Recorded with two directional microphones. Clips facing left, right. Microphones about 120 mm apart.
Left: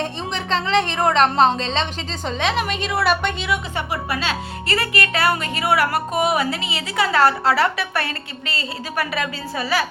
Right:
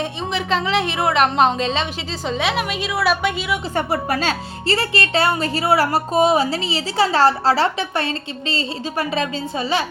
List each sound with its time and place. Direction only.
0.0 s a woman's voice: 5° right (ahead or behind)
3.8 s a woman's voice: 45° right (ahead or behind)
4.6 s a woman's voice: 30° right (ahead or behind)